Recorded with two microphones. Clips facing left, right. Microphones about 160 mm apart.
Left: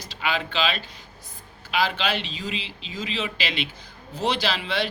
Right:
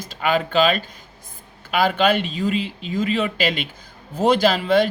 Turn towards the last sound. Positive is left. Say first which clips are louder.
# right 9 dB
turn(degrees=-50)  # may be behind; listen again after turning